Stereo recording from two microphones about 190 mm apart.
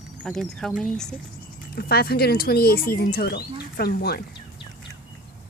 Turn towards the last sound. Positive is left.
turn(degrees=55)  # may be behind; listen again after turning